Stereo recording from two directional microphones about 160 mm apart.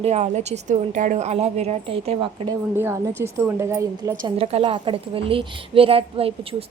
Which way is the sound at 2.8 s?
15° right (ahead or behind).